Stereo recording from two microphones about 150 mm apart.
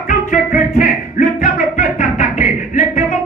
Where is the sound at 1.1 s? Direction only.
55° left (ahead or behind).